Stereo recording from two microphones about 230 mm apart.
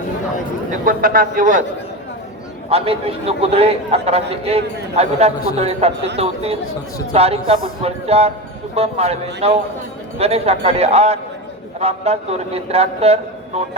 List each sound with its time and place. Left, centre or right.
0.7 s a man's voice: right
2.6 s a man's voice: right